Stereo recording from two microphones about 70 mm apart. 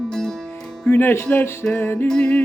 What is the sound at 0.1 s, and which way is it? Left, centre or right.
Music, centre.